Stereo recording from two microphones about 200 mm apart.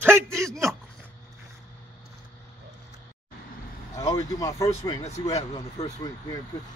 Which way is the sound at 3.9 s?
15° left (ahead or behind).